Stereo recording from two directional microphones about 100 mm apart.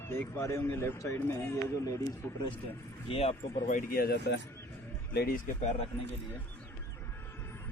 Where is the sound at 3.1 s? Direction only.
90° left.